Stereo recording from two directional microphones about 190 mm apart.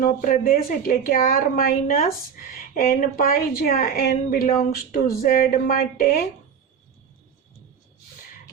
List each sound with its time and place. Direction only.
0.0 s a woman's voice: 50° left (ahead or behind)